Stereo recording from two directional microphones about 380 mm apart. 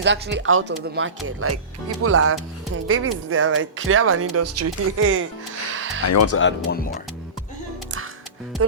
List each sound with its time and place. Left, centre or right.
0.0 s speech: right
5.7 s music: right
6.1 s speech: left